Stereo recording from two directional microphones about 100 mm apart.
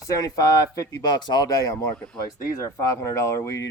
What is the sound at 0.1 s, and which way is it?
Speech, 40° left (ahead or behind).